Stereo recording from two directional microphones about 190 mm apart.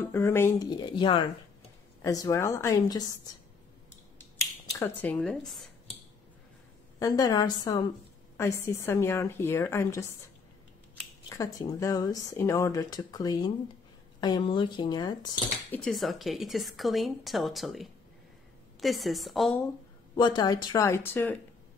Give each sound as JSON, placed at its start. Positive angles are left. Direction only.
{"t": 0.0, "sound": "speech", "side_deg": 15}
{"t": 4.7, "sound": "speech", "side_deg": 10}
{"t": 7.0, "sound": "speech", "side_deg": 20}
{"t": 15.7, "sound": "a woman's voice", "side_deg": 0}
{"t": 20.2, "sound": "speech", "side_deg": 25}